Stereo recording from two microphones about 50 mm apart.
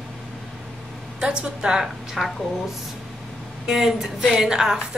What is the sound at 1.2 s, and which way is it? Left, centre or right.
Speech, centre.